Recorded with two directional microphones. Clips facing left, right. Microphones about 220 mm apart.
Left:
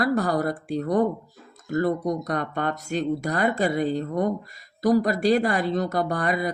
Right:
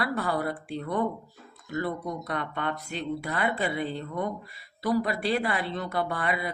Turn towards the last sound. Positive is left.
turn(degrees=40)  # may be behind; listen again after turning